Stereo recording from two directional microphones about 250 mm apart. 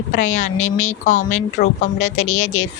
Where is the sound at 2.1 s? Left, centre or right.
Left.